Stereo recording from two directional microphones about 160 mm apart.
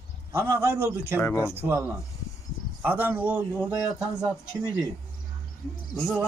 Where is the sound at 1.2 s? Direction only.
15° left (ahead or behind).